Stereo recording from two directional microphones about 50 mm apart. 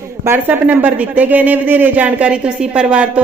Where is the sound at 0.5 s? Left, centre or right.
Right.